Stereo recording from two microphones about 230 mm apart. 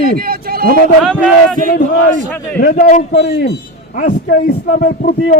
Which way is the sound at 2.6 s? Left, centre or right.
Left.